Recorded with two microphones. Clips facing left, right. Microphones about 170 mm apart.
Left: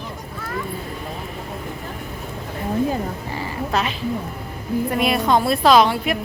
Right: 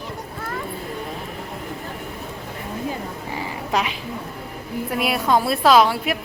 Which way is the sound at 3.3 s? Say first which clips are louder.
Even; 15° right (ahead or behind).